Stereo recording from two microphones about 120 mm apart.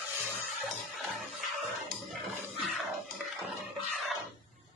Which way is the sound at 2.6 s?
Centre (ahead or behind).